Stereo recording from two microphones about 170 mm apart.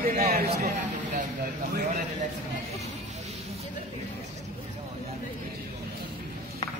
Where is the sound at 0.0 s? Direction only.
60° right (ahead or behind).